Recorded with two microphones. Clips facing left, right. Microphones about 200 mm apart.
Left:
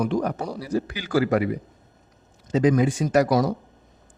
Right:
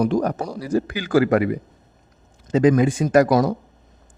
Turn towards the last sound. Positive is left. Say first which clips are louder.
# right 4 dB
turn(degrees=-50)  # may be behind; listen again after turning